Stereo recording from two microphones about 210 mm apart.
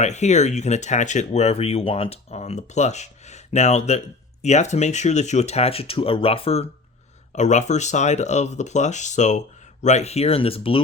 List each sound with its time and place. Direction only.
0.0 s speech: 35° left (ahead or behind)